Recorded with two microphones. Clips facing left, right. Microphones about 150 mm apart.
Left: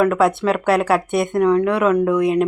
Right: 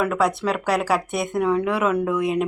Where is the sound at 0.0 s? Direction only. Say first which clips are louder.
Left 5 dB; centre (ahead or behind).